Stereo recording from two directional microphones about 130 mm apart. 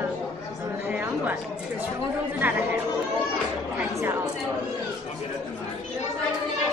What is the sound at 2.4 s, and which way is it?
Speech, 15° right (ahead or behind).